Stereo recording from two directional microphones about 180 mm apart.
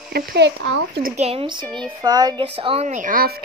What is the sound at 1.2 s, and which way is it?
A woman's voice, 30° right (ahead or behind).